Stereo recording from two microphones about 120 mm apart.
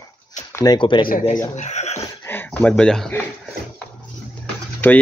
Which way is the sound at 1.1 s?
90° left.